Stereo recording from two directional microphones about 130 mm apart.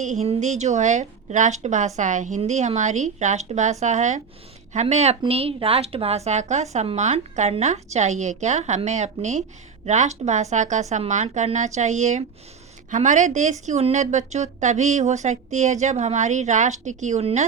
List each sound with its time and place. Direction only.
0.0 s a woman's voice: 65° right (ahead or behind)